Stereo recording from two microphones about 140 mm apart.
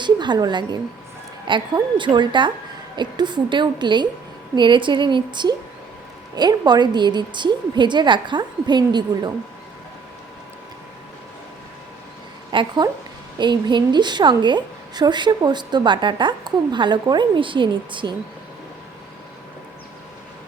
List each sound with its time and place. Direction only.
0.0 s a woman's voice: 30° right (ahead or behind)
12.5 s a woman's voice: 30° right (ahead or behind)